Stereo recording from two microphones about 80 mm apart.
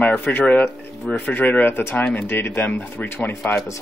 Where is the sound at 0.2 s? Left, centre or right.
Centre.